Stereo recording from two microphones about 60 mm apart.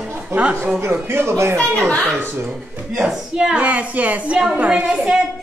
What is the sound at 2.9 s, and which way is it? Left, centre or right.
A woman's voice, centre.